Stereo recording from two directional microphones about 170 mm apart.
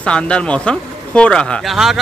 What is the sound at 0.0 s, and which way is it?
Speech, 5° left (ahead or behind).